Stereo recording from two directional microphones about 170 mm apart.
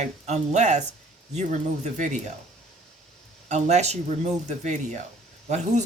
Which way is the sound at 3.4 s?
40° right (ahead or behind).